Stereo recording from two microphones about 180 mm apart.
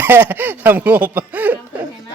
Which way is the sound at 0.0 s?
10° right (ahead or behind).